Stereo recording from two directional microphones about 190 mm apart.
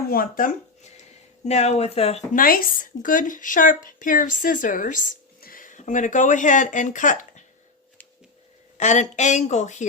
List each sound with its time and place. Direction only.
0.1 s speech: 45° left (ahead or behind)
2.3 s speech: 50° left (ahead or behind)
8.8 s speech: 40° left (ahead or behind)